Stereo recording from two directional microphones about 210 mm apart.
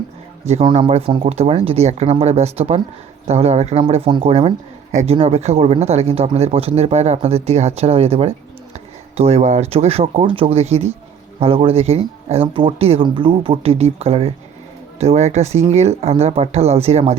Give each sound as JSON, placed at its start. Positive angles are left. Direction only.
{"t": 0.4, "sound": "speech", "side_deg": -25}